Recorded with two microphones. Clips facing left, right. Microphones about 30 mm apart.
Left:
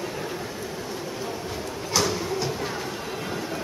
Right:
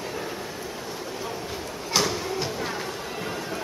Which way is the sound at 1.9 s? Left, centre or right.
Right.